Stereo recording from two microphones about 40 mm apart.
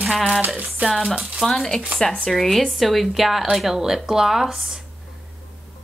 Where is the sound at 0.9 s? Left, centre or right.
Centre.